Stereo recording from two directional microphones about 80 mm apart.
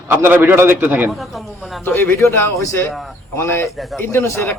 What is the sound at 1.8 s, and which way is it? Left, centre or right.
A man's voice, left.